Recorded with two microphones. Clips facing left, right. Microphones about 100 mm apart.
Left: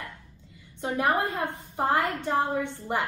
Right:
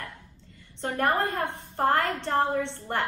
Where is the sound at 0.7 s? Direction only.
10° left (ahead or behind).